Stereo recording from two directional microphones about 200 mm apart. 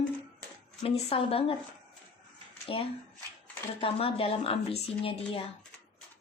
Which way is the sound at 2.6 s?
30° left (ahead or behind).